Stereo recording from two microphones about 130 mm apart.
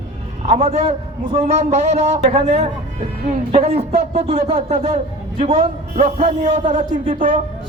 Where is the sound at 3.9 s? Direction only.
60° right (ahead or behind).